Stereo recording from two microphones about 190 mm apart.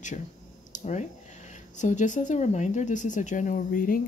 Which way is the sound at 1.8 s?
40° left (ahead or behind).